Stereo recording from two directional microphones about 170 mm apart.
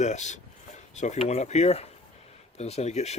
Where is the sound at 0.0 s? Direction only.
45° left (ahead or behind).